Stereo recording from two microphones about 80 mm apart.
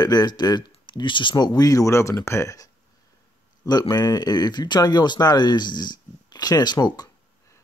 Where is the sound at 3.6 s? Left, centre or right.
Left.